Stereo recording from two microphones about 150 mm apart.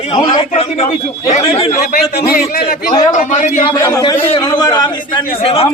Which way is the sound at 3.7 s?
25° left (ahead or behind).